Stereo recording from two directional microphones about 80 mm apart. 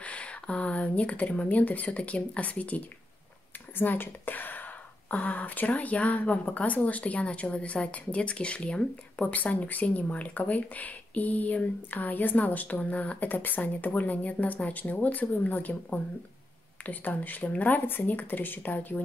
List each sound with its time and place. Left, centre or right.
0.0 s speech: centre
3.7 s a sound: left
5.1 s a woman's voice: centre